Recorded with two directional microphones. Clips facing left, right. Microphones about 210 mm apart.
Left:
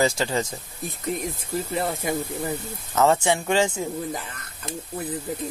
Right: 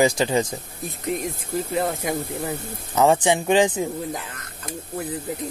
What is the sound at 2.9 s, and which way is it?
Speech, 15° right (ahead or behind).